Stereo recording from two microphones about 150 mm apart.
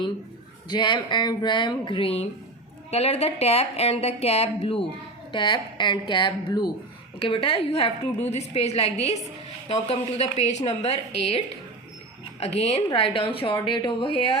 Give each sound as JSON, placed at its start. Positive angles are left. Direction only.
{"t": 0.7, "sound": "a woman's voice", "side_deg": 30}